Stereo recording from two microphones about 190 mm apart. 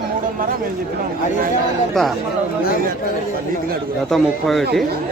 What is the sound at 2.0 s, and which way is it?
Speech, centre (ahead or behind).